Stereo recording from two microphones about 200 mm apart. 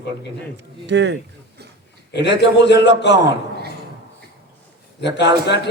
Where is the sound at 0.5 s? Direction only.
60° right (ahead or behind).